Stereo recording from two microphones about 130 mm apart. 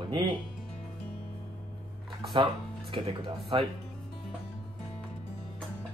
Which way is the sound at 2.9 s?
40° right (ahead or behind).